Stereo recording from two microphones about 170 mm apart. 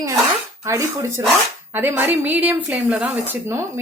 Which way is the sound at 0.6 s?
15° right (ahead or behind).